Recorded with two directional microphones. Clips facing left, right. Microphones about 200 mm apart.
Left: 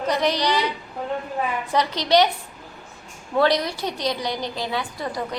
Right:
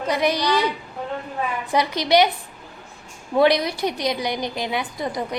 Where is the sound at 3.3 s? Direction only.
15° right (ahead or behind).